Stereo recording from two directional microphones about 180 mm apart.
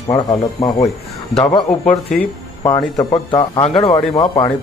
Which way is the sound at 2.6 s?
30° left (ahead or behind).